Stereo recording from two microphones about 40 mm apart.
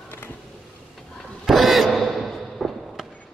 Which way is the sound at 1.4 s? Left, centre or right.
Centre.